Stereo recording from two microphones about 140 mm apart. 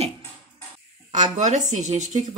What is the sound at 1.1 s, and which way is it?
Speech, 60° right (ahead or behind).